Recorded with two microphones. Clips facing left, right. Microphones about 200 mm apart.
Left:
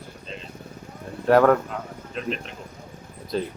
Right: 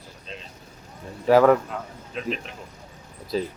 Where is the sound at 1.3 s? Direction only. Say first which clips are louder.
Right 1 dB; centre (ahead or behind).